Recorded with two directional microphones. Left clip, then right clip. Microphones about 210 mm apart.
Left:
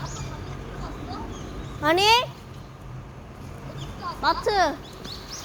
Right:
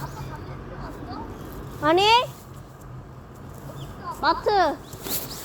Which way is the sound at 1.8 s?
20° right (ahead or behind).